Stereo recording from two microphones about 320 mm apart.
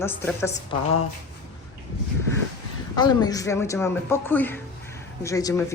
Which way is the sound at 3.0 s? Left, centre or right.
Centre.